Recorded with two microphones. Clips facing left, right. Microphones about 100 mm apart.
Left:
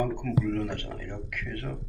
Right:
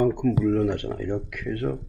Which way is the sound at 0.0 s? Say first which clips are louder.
Right 7 dB; 15° right (ahead or behind).